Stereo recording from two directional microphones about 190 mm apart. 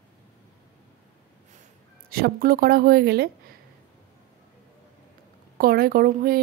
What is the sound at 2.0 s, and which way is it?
A woman's voice, 50° right (ahead or behind).